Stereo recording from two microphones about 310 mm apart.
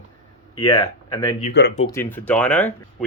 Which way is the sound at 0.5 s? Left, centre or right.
Centre.